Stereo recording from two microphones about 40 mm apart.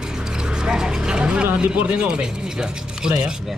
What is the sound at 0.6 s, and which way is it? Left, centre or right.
Speech, centre.